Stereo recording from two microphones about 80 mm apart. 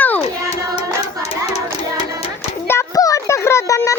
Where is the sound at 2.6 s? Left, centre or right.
Left.